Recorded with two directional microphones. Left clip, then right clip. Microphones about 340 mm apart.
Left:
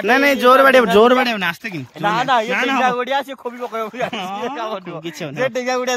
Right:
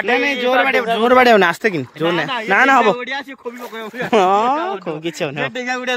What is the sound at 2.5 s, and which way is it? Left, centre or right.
Speech, centre.